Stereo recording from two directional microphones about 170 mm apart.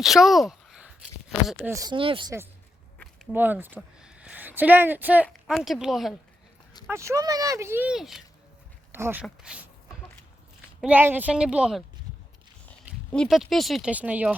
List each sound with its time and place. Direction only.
0.0 s a sound: centre (ahead or behind)
1.7 s speech: 25° right (ahead or behind)
3.3 s speech: 10° right (ahead or behind)
6.8 s speech: 15° right (ahead or behind)
8.9 s speech: 15° right (ahead or behind)
10.8 s speech: 10° right (ahead or behind)
13.1 s speech: centre (ahead or behind)